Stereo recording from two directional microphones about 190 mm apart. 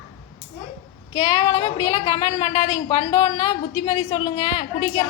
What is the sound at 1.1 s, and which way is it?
A woman's voice, 30° left (ahead or behind).